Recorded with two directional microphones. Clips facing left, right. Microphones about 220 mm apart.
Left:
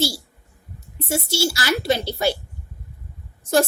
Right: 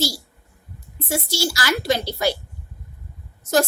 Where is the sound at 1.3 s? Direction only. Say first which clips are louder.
Left 2 dB; 25° left (ahead or behind).